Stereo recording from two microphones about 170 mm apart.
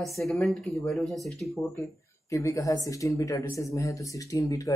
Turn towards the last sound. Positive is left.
turn(degrees=20)  # may be behind; listen again after turning